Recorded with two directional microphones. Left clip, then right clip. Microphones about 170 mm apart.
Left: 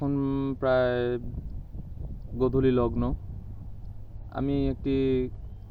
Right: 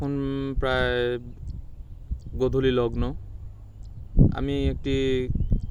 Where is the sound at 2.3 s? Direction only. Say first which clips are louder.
Right 1 dB; 30° right (ahead or behind).